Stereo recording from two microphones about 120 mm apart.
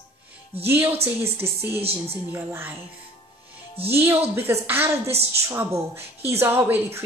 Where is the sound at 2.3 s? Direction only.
20° right (ahead or behind).